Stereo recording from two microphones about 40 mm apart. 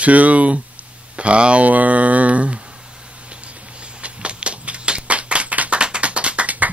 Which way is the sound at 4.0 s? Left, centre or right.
Right.